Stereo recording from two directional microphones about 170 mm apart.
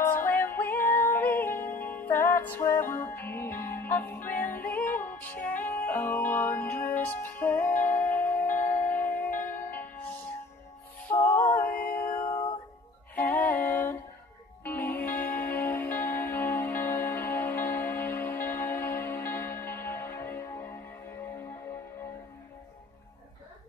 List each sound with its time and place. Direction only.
0.0 s music: 15° left (ahead or behind)
12.0 s music: 55° left (ahead or behind)
12.3 s music: 25° left (ahead or behind)
13.1 s music: 10° left (ahead or behind)